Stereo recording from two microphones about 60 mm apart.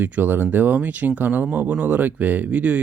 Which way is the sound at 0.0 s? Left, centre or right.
Right.